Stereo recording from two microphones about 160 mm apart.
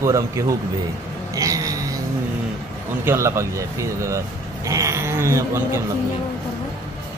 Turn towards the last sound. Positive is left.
turn(degrees=-15)  # may be behind; listen again after turning